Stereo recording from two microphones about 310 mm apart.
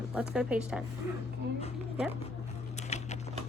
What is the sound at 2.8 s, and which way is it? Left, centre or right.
Typing, left.